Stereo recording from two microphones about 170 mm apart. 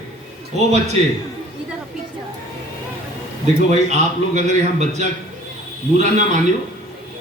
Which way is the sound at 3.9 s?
45° right (ahead or behind).